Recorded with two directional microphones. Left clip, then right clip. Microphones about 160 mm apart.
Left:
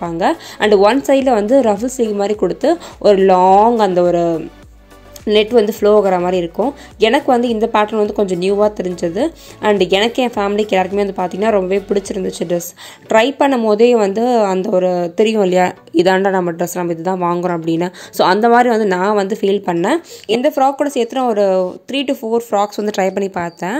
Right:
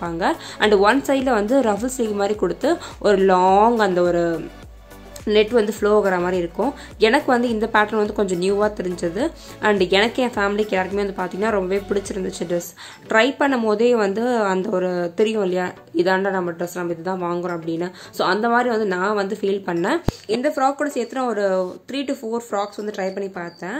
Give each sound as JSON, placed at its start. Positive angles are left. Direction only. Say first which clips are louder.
{"t": 0.0, "sound": "a woman's voice", "louder": "left 5 dB", "side_deg": 20}
{"t": 15.3, "sound": "a woman's voice", "louder": "left 9 dB", "side_deg": 40}
{"t": 22.6, "sound": "speech", "louder": "left 9 dB", "side_deg": 55}